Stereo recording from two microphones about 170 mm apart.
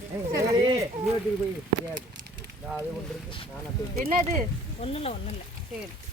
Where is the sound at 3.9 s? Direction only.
60° right (ahead or behind).